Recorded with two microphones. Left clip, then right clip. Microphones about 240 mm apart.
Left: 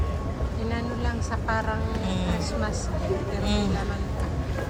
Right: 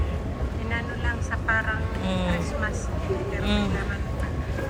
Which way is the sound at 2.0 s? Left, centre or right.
Centre.